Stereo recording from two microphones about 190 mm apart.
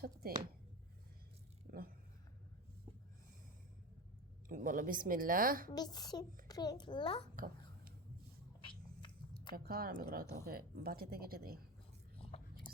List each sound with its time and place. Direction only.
0.0 s speech: 50° right (ahead or behind)
1.7 s a sound: 55° right (ahead or behind)
4.4 s speech: 45° right (ahead or behind)
5.7 s a child's voice: 20° left (ahead or behind)
7.3 s babbling: 50° right (ahead or behind)
8.6 s a sound: 25° left (ahead or behind)
9.6 s speech: 50° right (ahead or behind)
12.1 s whispering: 30° left (ahead or behind)
12.7 s whispering: 5° left (ahead or behind)